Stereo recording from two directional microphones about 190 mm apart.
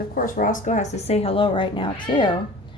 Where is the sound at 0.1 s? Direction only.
45° left (ahead or behind).